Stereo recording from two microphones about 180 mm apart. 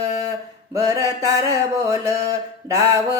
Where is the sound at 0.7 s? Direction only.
20° right (ahead or behind).